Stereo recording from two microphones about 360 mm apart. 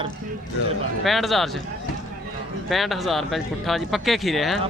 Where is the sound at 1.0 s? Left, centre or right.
Centre.